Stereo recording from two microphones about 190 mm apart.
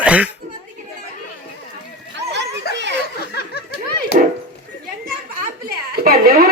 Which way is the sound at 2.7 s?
55° left (ahead or behind).